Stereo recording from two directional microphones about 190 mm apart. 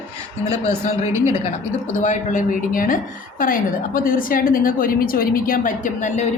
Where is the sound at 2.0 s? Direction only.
40° left (ahead or behind).